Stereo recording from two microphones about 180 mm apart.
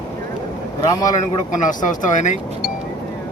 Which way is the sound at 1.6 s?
45° left (ahead or behind).